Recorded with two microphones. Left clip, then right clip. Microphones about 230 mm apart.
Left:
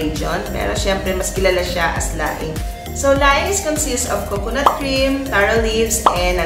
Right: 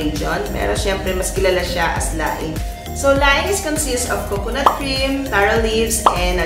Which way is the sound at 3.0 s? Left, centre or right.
Centre.